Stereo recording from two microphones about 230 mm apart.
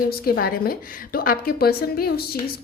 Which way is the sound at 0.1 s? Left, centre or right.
Left.